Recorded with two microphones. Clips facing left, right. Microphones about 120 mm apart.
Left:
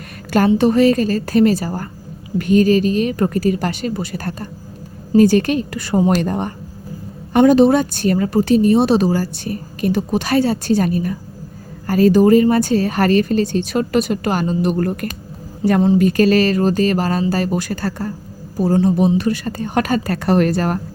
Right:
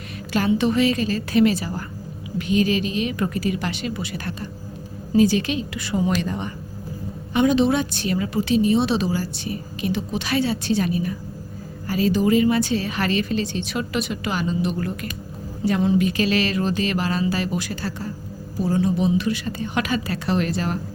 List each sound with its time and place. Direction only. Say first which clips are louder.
0.3 s a woman's voice: left 6 dB; 45° left (ahead or behind)